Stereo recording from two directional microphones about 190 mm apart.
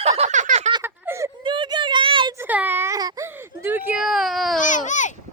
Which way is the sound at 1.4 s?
25° right (ahead or behind).